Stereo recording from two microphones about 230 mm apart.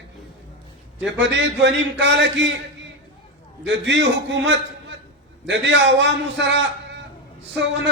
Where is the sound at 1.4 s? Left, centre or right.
Right.